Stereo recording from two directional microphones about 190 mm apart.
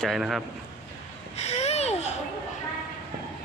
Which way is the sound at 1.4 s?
35° left (ahead or behind).